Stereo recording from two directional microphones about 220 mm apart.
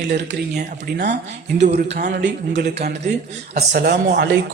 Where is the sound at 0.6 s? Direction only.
50° right (ahead or behind).